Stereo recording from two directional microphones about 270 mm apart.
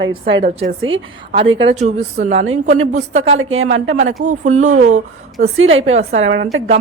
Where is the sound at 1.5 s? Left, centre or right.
Right.